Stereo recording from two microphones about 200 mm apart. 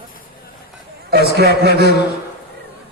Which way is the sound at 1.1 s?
55° right (ahead or behind).